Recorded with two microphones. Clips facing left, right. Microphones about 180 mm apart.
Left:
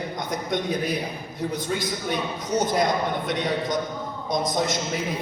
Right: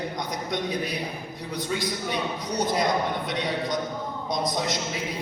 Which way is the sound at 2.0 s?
50° left (ahead or behind).